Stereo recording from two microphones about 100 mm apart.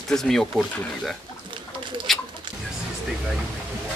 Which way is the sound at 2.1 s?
Centre (ahead or behind).